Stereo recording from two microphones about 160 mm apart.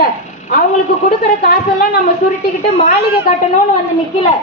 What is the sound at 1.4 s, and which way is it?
Speech, 80° left.